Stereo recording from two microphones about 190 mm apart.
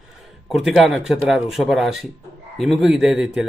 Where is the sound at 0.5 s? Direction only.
Centre (ahead or behind).